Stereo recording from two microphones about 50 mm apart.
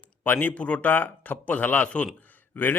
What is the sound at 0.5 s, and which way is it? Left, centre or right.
Speech, left.